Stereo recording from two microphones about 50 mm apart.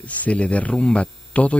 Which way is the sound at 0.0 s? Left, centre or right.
Left.